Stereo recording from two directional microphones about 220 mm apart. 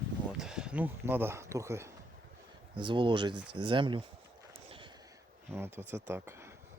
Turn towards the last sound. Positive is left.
turn(degrees=-10)  # may be behind; listen again after turning